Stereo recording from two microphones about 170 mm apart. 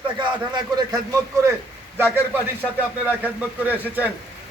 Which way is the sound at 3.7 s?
10° right (ahead or behind).